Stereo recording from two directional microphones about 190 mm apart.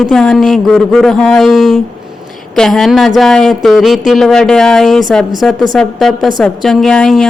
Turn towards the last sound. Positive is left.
turn(degrees=5)  # may be behind; listen again after turning